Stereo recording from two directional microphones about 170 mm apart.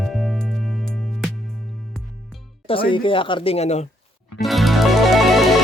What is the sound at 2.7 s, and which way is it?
Speech, 30° left (ahead or behind).